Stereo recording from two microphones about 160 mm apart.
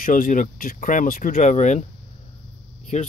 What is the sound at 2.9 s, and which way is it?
Speech, 45° left (ahead or behind).